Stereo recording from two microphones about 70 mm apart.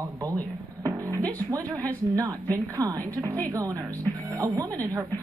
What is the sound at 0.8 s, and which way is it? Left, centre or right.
A woman's voice, right.